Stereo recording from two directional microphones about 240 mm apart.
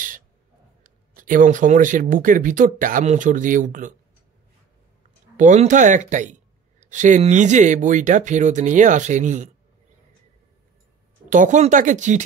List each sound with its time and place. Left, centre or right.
0.8 s speech: right
5.4 s speech: right
11.2 s speech: right